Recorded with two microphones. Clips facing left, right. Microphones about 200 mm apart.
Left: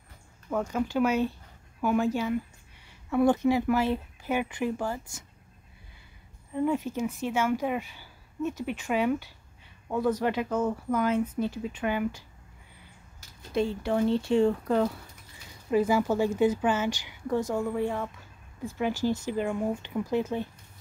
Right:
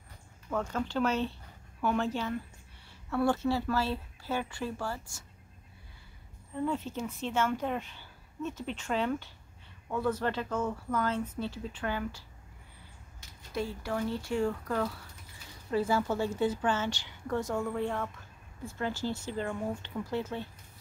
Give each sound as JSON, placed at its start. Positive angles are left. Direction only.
{"t": 0.5, "sound": "speech", "side_deg": 10}
{"t": 6.5, "sound": "speech", "side_deg": 15}
{"t": 13.5, "sound": "speech", "side_deg": 25}